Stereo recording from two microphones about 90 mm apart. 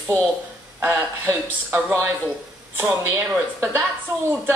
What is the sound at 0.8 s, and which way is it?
A woman's voice, 20° right (ahead or behind).